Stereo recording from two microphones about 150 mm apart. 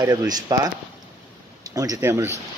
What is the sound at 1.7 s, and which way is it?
Speech, 25° right (ahead or behind).